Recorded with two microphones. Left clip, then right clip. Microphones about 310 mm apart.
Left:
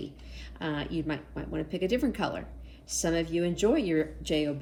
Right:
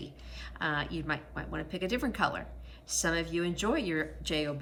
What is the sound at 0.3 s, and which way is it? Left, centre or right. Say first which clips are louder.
A woman's voice: right 2 dB; centre.